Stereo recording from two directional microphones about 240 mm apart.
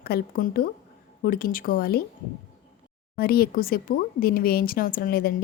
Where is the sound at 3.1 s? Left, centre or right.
Left.